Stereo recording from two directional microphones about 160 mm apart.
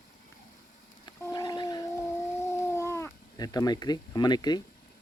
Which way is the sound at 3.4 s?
25° left (ahead or behind).